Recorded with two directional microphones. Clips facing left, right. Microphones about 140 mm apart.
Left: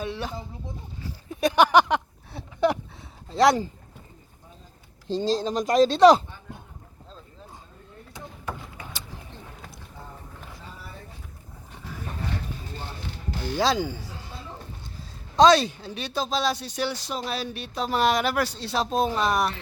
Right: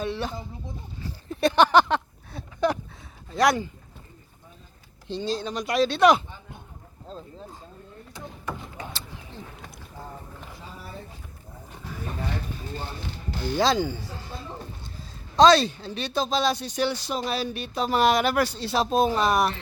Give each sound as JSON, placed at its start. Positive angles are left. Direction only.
{"t": 0.0, "sound": "speech", "side_deg": 5}
{"t": 2.3, "sound": "a sound", "side_deg": 25}
{"t": 3.2, "sound": "speech", "side_deg": 25}
{"t": 5.0, "sound": "speech", "side_deg": 35}
{"t": 8.4, "sound": "a sound", "side_deg": 15}
{"t": 13.4, "sound": "speech", "side_deg": 10}
{"t": 15.4, "sound": "speech", "side_deg": 15}